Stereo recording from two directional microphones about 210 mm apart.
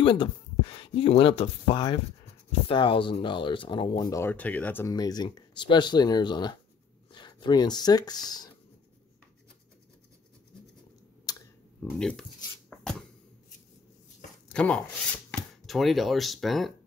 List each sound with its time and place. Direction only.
0.0 s speech: 25° left (ahead or behind)
11.3 s a sound: 20° left (ahead or behind)
11.8 s speech: 5° left (ahead or behind)
14.5 s speech: 5° left (ahead or behind)